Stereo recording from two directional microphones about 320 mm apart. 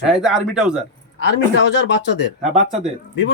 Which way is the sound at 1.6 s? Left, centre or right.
Left.